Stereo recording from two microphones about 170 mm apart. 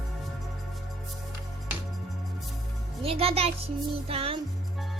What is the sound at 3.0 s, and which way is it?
A child's voice, 35° right (ahead or behind).